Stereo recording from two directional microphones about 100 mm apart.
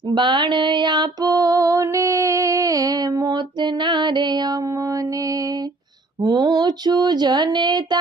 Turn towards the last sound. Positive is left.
turn(degrees=-45)  # may be behind; listen again after turning